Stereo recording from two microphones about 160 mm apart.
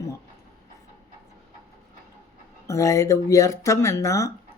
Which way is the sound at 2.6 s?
20° left (ahead or behind).